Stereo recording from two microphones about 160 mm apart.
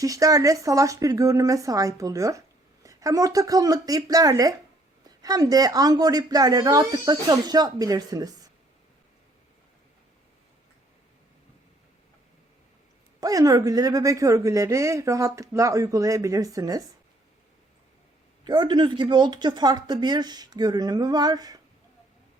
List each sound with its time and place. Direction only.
0.0 s a woman's voice: 20° right (ahead or behind)
13.1 s a woman's voice: 20° right (ahead or behind)
18.4 s a woman's voice: 30° right (ahead or behind)